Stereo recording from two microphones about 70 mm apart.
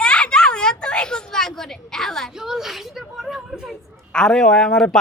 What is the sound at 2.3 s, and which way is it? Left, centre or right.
Speech, centre.